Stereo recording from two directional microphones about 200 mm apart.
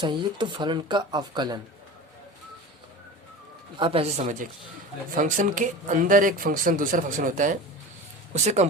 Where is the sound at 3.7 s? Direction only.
25° right (ahead or behind).